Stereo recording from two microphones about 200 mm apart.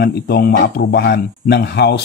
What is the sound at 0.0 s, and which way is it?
Speech, 50° left (ahead or behind).